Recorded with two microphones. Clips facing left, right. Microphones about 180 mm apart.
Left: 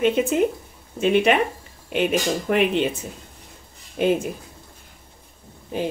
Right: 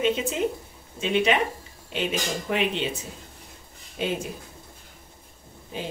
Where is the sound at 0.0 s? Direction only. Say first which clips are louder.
Left 5 dB; 55° left (ahead or behind).